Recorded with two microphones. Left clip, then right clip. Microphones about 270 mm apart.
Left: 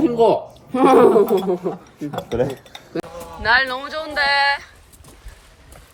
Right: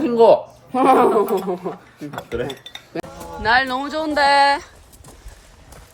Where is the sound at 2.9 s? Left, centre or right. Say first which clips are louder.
Left 1 dB; centre.